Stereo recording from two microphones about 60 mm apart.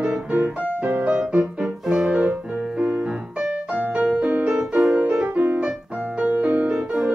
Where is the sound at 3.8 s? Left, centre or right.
Right.